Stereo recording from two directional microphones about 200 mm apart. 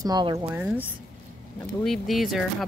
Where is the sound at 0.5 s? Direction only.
5° right (ahead or behind).